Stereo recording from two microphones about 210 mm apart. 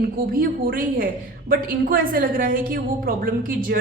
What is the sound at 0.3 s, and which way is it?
A woman's voice, 45° right (ahead or behind).